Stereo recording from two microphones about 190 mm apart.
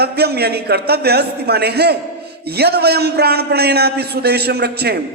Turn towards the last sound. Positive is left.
turn(degrees=-55)  # may be behind; listen again after turning